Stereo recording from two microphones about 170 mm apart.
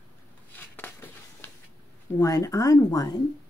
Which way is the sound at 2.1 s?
20° left (ahead or behind).